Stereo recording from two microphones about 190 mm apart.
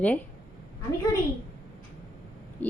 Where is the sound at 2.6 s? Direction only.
10° left (ahead or behind).